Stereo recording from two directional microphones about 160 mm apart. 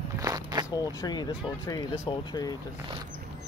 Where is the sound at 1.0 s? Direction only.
25° left (ahead or behind).